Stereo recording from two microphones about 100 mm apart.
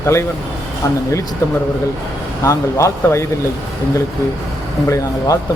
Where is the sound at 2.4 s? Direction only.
30° left (ahead or behind).